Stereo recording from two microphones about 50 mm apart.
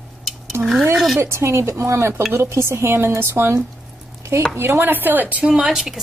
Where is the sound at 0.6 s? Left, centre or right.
Right.